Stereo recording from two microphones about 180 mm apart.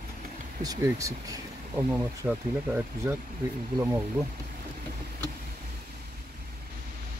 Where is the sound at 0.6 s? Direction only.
20° right (ahead or behind).